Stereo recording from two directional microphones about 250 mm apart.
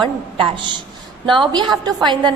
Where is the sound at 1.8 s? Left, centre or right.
Centre.